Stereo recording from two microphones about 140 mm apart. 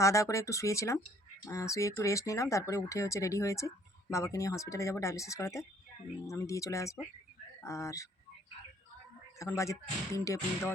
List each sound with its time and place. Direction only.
0.0 s speech: 20° left (ahead or behind)
9.4 s speech: 20° left (ahead or behind)